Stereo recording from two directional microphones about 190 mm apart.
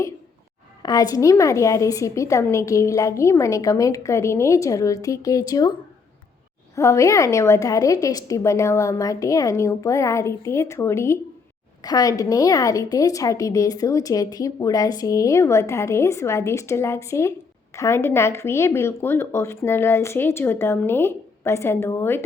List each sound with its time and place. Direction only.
0.8 s a woman's voice: 20° left (ahead or behind)
6.7 s a woman's voice: 15° left (ahead or behind)